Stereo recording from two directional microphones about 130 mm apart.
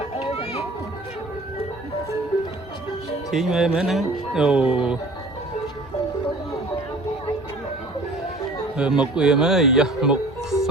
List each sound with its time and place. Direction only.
0.0 s children playing: 45° left (ahead or behind)
3.3 s speech: 5° right (ahead or behind)
8.8 s speech: 5° right (ahead or behind)